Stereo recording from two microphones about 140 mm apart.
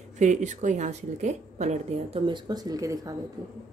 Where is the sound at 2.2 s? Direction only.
30° right (ahead or behind).